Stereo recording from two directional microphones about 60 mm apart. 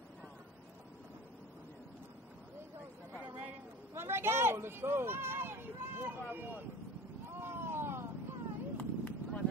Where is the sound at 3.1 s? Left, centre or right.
Right.